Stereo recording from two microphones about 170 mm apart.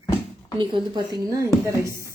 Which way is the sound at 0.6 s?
30° right (ahead or behind).